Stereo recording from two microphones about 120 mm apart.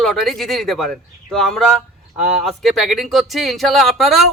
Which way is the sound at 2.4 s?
Centre (ahead or behind).